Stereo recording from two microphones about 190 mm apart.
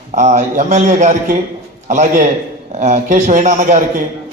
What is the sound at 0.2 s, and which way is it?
A man's voice, 35° right (ahead or behind).